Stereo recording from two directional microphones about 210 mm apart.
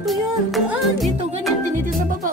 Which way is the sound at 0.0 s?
Centre (ahead or behind).